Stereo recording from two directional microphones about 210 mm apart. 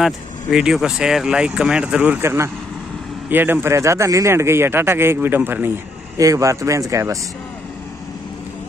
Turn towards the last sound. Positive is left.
turn(degrees=-15)  # may be behind; listen again after turning